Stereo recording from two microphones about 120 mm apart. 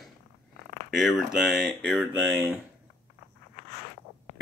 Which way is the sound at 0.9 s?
Centre (ahead or behind).